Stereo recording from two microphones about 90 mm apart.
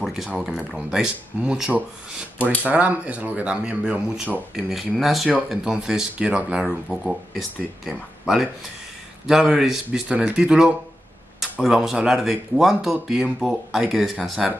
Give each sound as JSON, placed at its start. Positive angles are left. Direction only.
{"t": 0.0, "sound": "a sound", "side_deg": -5}
{"t": 0.4, "sound": "speech", "side_deg": -10}
{"t": 2.3, "sound": "speech", "side_deg": 15}
{"t": 2.6, "sound": "speech", "side_deg": -15}
{"t": 4.6, "sound": "speech", "side_deg": 0}